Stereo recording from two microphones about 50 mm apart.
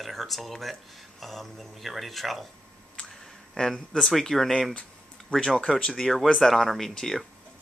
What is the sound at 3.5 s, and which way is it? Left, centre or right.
Speech, centre.